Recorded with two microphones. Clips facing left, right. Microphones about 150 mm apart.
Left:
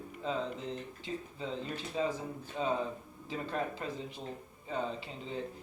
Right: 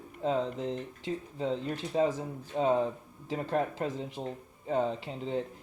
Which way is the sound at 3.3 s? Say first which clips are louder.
Right 5 dB; 70° right (ahead or behind).